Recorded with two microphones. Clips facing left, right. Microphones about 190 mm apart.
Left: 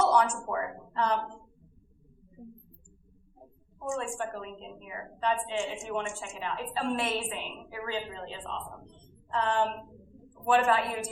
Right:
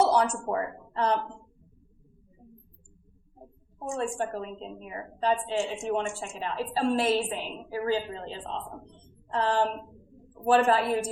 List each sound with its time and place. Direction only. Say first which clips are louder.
0.0 s speech: right 2 dB; 35° right (ahead or behind)
3.8 s a woman's voice: right 3 dB; 35° right (ahead or behind)